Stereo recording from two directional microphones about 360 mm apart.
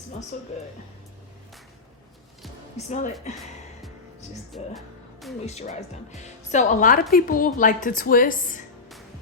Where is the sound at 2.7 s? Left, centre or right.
Centre.